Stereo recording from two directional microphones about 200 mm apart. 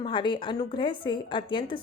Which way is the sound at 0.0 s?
25° left (ahead or behind).